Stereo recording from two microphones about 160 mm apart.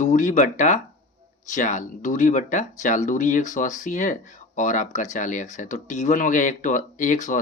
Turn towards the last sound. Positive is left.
turn(degrees=50)  # may be behind; listen again after turning